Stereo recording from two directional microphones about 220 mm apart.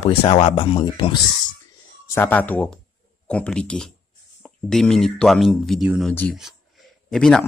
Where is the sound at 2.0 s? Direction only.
10° left (ahead or behind).